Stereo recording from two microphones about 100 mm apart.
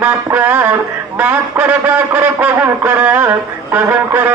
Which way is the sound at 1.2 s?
15° right (ahead or behind).